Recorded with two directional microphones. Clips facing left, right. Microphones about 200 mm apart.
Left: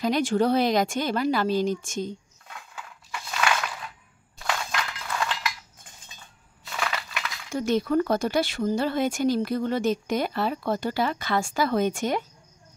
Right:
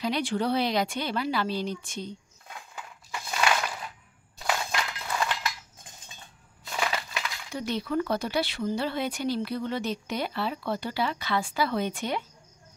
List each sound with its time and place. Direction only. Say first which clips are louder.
0.0 s speech: left 5 dB; 45° left (ahead or behind)
3.3 s a sound: even; 20° right (ahead or behind)
6.7 s crushing: right 1 dB; 20° right (ahead or behind)
7.5 s speech: left 6 dB; 45° left (ahead or behind)